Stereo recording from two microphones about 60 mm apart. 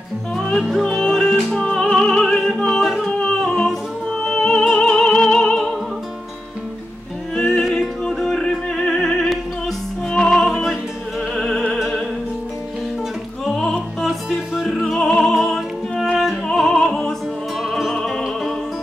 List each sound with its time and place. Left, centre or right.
0.4 s music: centre
3.1 s music: centre
7.3 s music: centre
13.5 s music: centre
14.0 s music: centre
17.6 s music: centre
17.9 s music: centre